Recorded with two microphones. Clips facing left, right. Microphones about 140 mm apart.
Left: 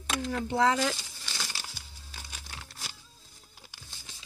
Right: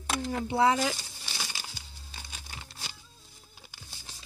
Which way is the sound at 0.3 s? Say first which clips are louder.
Right 1 dB; 10° right (ahead or behind).